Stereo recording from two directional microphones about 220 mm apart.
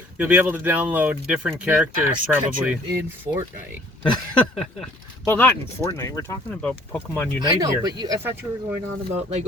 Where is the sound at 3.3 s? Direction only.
20° right (ahead or behind).